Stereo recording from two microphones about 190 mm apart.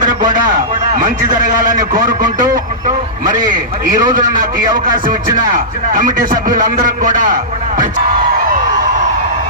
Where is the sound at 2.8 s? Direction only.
45° right (ahead or behind).